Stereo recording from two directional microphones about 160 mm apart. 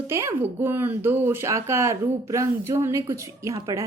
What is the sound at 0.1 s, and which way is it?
A woman's voice, 15° right (ahead or behind).